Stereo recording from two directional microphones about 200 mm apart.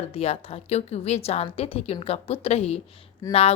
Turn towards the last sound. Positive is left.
turn(degrees=15)  # may be behind; listen again after turning